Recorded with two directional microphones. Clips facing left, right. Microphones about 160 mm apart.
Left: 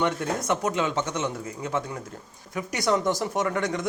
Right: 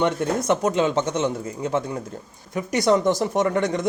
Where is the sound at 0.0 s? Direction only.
25° right (ahead or behind).